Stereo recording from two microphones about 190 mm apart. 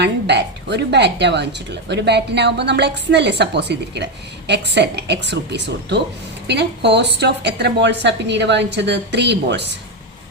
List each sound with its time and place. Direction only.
0.0 s a woman's voice: 65° right (ahead or behind)